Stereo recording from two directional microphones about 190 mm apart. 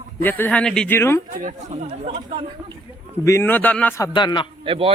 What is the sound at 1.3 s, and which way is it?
Speech, 40° right (ahead or behind).